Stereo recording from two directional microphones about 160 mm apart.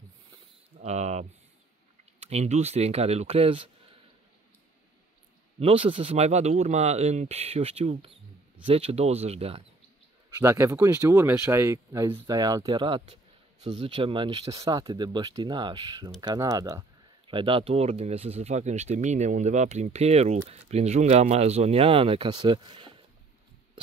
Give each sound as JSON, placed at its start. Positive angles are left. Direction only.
{"t": 0.7, "sound": "a sound", "side_deg": -45}
{"t": 2.1, "sound": "speech", "side_deg": -40}
{"t": 5.6, "sound": "speech", "side_deg": -35}
{"t": 10.4, "sound": "speech", "side_deg": -15}